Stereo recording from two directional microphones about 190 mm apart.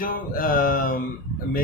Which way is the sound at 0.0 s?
45° left (ahead or behind).